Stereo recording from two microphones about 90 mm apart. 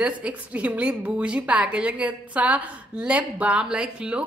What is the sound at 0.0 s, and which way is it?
A woman's voice, 15° right (ahead or behind).